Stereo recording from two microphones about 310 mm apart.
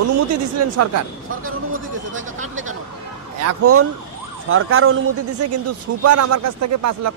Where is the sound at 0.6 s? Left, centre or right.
Right.